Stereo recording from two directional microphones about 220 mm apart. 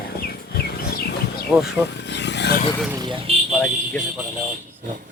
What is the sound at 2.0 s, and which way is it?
Rub, 50° left (ahead or behind).